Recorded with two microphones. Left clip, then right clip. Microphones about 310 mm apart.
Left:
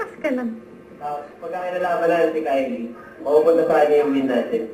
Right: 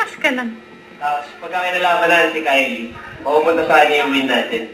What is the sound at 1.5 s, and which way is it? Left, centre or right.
A woman's voice, centre.